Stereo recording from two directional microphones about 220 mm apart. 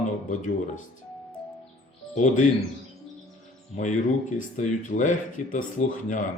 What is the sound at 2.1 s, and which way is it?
Speech, 35° left (ahead or behind).